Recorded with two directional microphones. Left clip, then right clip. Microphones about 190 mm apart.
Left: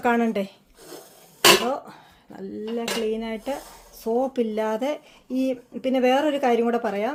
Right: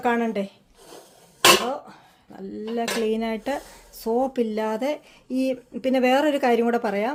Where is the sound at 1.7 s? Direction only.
20° left (ahead or behind).